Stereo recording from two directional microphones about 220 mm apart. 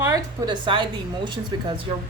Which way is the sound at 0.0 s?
20° right (ahead or behind).